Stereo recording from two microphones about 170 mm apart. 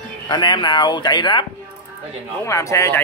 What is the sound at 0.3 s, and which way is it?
Speech, 25° left (ahead or behind).